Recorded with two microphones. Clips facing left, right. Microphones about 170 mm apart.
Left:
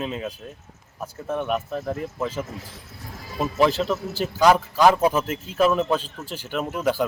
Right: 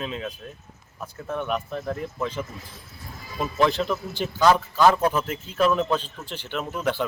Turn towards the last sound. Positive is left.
turn(degrees=10)  # may be behind; listen again after turning